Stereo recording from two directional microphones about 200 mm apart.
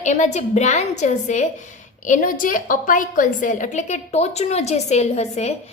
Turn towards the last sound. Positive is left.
turn(degrees=35)  # may be behind; listen again after turning